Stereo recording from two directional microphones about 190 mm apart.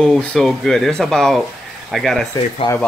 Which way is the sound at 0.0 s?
5° left (ahead or behind).